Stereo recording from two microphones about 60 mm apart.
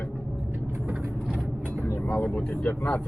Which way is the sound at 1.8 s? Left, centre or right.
Left.